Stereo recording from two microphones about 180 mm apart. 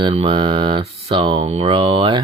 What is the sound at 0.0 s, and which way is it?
Speech, 30° right (ahead or behind).